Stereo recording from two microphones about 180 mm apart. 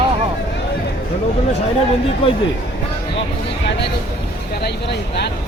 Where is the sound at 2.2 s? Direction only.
30° left (ahead or behind).